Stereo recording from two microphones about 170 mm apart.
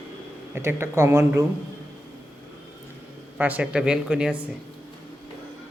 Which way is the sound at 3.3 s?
10° right (ahead or behind).